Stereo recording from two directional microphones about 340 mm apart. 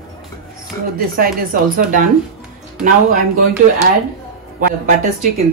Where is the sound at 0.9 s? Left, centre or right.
Right.